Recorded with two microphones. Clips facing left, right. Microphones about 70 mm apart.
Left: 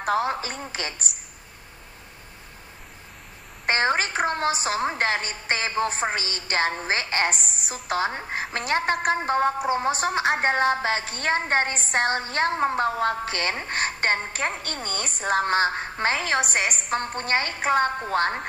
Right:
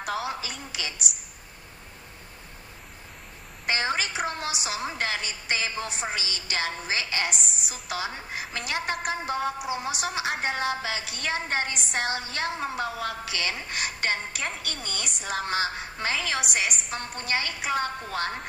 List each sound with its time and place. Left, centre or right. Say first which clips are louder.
0.0 s a woman's voice: left 7 dB; left
3.6 s a woman's voice: left 5 dB; left